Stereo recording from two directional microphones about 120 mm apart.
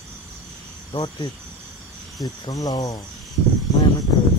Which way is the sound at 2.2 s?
30° left (ahead or behind).